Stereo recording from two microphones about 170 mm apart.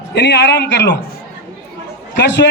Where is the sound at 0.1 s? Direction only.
80° left.